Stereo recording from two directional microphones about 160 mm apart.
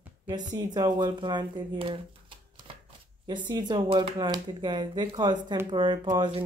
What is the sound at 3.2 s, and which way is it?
A man's voice, 30° right (ahead or behind).